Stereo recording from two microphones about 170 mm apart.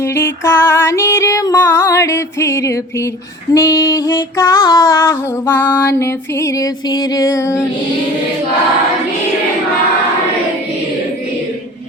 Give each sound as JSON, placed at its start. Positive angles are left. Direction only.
{"t": 0.0, "sound": "female singing", "side_deg": 15}